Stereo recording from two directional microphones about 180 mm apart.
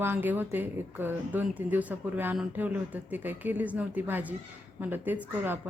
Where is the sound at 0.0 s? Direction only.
10° right (ahead or behind).